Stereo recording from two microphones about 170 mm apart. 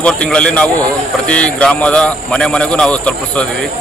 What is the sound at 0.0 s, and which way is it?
Speech, 5° left (ahead or behind).